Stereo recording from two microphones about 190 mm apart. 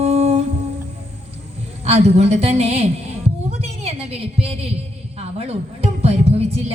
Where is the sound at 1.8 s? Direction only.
35° right (ahead or behind).